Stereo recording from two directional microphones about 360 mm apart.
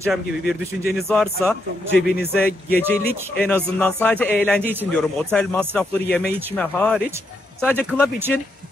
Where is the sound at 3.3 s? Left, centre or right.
Centre.